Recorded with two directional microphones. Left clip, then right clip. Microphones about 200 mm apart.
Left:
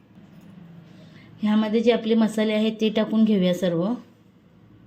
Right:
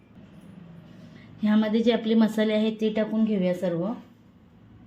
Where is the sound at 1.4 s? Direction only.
10° left (ahead or behind); by 3.7 s 30° left (ahead or behind).